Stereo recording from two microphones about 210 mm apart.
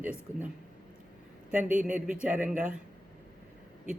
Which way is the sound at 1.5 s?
10° right (ahead or behind).